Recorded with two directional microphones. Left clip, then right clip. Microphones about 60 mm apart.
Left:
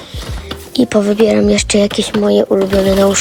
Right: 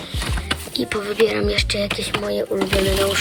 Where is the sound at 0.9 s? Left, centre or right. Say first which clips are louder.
Left 7 dB; left.